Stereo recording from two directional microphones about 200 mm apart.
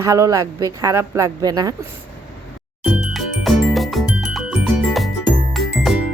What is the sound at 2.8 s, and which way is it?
Music, centre (ahead or behind).